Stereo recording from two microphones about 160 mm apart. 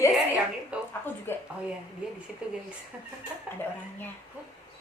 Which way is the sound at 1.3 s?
15° left (ahead or behind).